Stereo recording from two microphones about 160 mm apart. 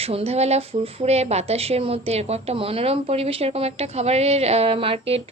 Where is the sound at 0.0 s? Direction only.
40° right (ahead or behind).